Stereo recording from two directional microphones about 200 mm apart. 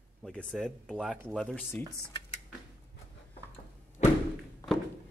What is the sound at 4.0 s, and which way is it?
Thump, 35° left (ahead or behind).